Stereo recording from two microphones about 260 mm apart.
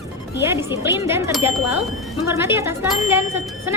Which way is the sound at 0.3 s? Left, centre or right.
Centre.